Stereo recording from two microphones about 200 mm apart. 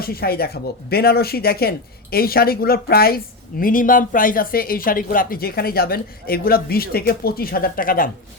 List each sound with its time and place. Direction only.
0.0 s speech: 50° left (ahead or behind)